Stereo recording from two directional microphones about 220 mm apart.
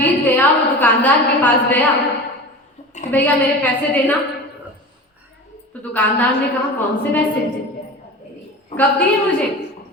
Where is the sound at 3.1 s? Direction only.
5° left (ahead or behind).